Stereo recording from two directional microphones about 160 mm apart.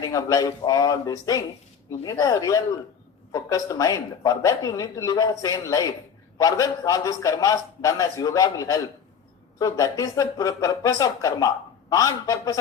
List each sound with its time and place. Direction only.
0.0 s speech: 20° left (ahead or behind)